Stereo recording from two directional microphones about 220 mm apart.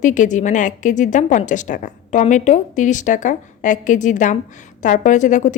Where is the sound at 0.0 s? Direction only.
35° left (ahead or behind).